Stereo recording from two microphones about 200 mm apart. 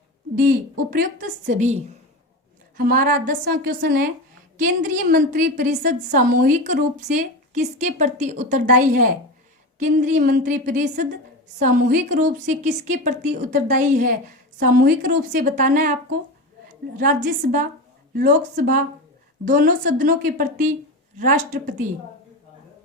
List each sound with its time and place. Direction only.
0.3 s a woman's voice: 45° right (ahead or behind)
2.7 s a woman's voice: 45° right (ahead or behind)
17.0 s a woman's voice: 40° right (ahead or behind)